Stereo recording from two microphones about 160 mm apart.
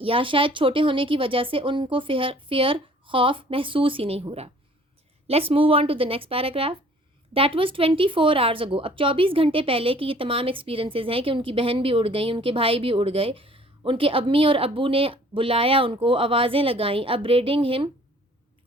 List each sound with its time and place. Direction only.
0.0 s speech: 35° right (ahead or behind)